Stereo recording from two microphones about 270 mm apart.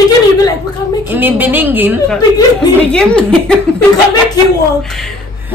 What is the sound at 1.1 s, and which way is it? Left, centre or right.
A woman's voice, centre.